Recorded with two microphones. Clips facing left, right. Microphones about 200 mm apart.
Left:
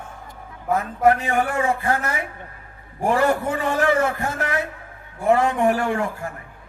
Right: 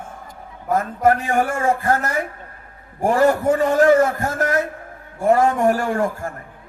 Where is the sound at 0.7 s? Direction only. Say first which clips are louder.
Right 1 dB; 40° right (ahead or behind).